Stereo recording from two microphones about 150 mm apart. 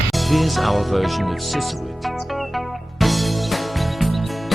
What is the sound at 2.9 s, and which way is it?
Music, centre (ahead or behind).